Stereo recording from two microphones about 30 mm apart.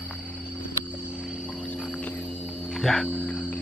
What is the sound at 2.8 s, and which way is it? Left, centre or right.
Cricket, centre.